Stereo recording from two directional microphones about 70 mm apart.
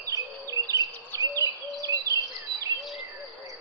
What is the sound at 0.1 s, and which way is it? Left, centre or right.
Bird, right.